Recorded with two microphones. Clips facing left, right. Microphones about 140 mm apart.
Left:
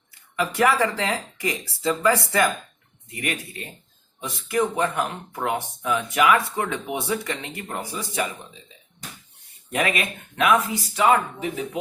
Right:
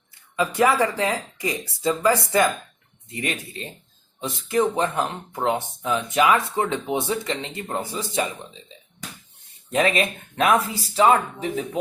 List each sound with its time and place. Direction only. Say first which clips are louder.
0.3 s speech: right 1 dB; 25° right (ahead or behind)
9.7 s speech: right 4 dB; 30° right (ahead or behind)